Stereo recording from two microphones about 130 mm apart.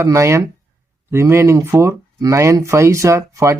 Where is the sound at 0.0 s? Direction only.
20° right (ahead or behind).